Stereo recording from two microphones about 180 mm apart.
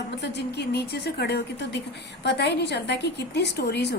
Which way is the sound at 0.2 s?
70° left (ahead or behind).